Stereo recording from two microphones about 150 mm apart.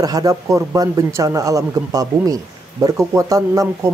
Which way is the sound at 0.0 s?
25° right (ahead or behind).